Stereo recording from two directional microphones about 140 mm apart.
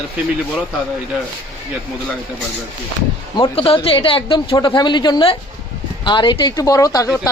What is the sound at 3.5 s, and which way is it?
A woman's voice, 45° left (ahead or behind).